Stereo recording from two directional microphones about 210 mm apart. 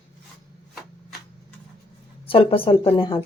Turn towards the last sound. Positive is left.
turn(degrees=20)  # may be behind; listen again after turning